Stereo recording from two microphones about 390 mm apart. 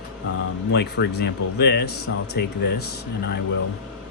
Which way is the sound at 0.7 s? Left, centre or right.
Left.